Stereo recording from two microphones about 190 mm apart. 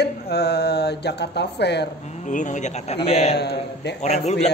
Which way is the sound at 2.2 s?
40° left (ahead or behind).